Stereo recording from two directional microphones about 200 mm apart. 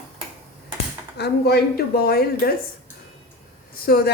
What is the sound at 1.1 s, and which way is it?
Speech, 55° left (ahead or behind).